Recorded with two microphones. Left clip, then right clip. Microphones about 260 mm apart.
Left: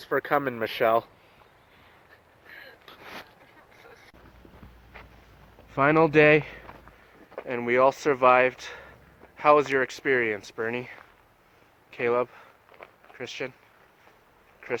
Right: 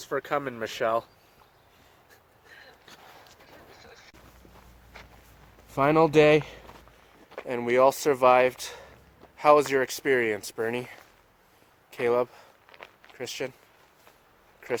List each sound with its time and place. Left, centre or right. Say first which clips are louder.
0.1 s speech: left 4 dB; centre
5.7 s speech: even; centre